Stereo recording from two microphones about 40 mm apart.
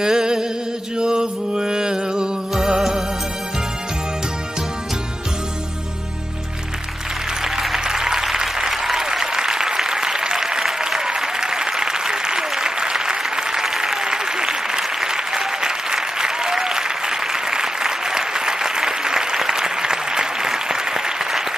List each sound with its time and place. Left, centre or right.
0.0 s a sound: centre
0.9 s music: right
7.8 s applause: centre